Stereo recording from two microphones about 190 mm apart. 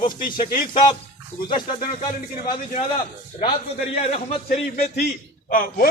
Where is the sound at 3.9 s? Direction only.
35° left (ahead or behind).